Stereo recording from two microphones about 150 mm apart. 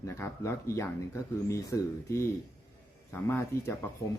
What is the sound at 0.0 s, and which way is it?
Speech, 20° left (ahead or behind).